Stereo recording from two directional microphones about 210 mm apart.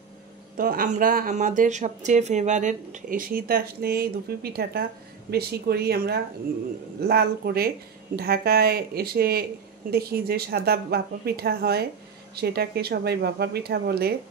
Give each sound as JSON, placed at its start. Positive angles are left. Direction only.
{"t": 0.6, "sound": "speech", "side_deg": -40}